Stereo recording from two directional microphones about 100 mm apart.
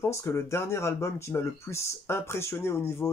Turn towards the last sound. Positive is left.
turn(degrees=25)  # may be behind; listen again after turning